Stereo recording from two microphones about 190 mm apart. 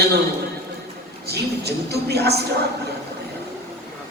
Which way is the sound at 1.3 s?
60° right (ahead or behind).